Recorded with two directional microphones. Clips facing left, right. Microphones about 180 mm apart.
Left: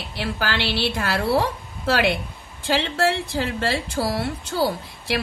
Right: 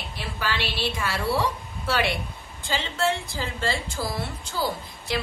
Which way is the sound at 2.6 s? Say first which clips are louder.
Left 5 dB; 65° left (ahead or behind).